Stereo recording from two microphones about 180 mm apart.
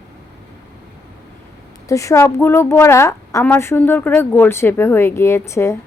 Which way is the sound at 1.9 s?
15° left (ahead or behind).